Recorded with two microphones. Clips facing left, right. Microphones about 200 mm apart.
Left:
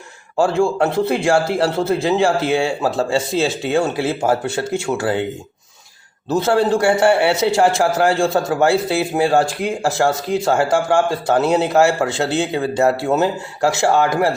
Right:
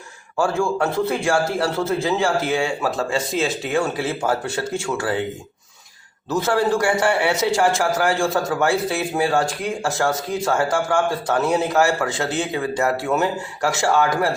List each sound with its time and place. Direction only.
0.6 s a man's voice: 25° left (ahead or behind)
6.2 s a man's voice: 25° left (ahead or behind)